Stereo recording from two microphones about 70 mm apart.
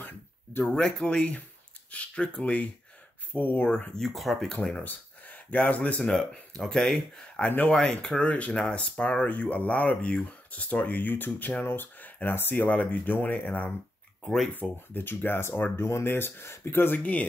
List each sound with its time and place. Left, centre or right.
0.0 s a sound: left
0.7 s speech: centre
3.9 s speech: centre
4.5 s speech: centre
7.4 s speech: left
7.7 s speech: centre
14.2 s speech: centre
14.5 s speech: left